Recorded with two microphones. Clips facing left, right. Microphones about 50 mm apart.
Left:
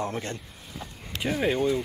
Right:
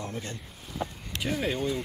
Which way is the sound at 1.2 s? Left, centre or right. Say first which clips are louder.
Left 4 dB; centre.